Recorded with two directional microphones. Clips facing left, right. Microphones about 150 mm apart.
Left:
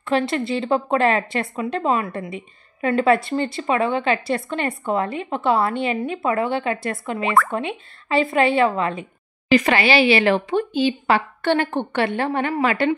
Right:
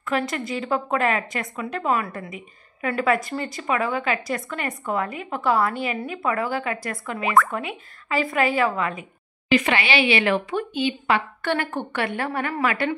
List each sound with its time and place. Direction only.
0.0 s a woman's voice: 30° left (ahead or behind)
9.5 s a woman's voice: 40° left (ahead or behind)